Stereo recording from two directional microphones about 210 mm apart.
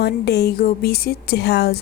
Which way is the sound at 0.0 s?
50° left (ahead or behind).